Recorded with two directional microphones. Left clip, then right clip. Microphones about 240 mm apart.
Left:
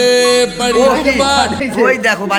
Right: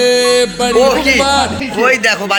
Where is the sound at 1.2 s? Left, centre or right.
Centre.